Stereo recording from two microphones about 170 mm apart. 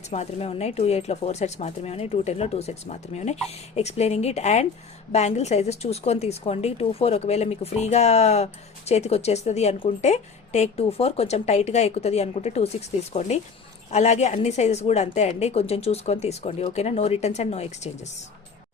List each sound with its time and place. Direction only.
0.1 s speech: 40° left (ahead or behind)